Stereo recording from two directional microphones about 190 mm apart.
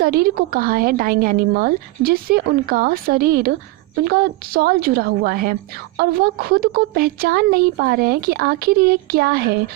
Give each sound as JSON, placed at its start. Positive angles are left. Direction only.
{"t": 0.0, "sound": "a woman's voice", "side_deg": -50}